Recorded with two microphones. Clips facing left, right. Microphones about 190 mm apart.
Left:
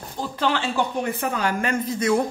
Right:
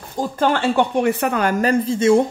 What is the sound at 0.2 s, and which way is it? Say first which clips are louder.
Speech: right 6 dB; 50° right (ahead or behind).